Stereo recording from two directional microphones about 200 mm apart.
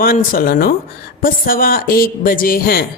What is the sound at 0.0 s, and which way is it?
Speech, 45° left (ahead or behind).